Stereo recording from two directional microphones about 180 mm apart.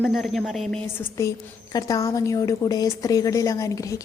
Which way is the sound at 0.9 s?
15° left (ahead or behind).